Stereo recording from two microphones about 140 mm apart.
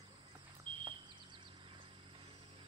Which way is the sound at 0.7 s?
35° right (ahead or behind).